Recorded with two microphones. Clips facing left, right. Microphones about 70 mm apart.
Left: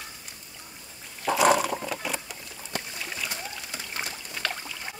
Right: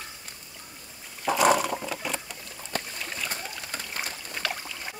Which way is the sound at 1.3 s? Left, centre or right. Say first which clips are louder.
Even; centre.